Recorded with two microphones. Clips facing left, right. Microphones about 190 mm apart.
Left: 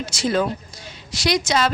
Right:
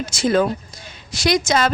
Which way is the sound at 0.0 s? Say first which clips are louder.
Right 3 dB; 50° right (ahead or behind).